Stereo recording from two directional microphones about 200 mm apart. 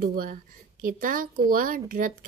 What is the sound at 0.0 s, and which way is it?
Speech, 45° right (ahead or behind).